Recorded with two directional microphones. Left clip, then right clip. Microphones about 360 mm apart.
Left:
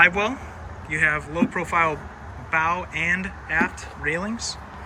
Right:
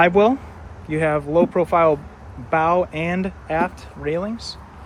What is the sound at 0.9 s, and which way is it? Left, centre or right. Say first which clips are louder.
Speech: right 1 dB; centre.